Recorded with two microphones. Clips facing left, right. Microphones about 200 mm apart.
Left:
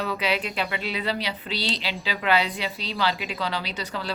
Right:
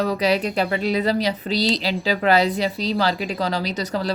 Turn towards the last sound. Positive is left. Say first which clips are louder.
# right 8 dB
turn(degrees=-40)  # may be behind; listen again after turning